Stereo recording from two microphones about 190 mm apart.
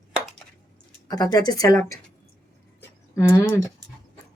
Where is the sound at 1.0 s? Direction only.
20° left (ahead or behind).